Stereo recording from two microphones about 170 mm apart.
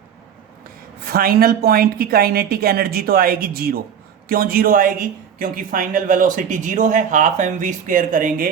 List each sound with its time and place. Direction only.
1.0 s a woman's voice: 60° right (ahead or behind)